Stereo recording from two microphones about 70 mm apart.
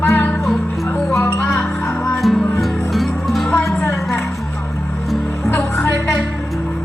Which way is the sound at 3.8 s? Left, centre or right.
Left.